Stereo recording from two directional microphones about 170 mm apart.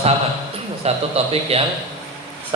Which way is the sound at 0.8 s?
40° right (ahead or behind).